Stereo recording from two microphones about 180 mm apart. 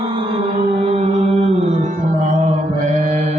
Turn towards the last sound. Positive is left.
turn(degrees=-40)  # may be behind; listen again after turning